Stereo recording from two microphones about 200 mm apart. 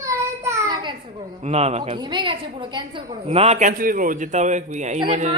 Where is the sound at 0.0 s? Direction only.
15° right (ahead or behind).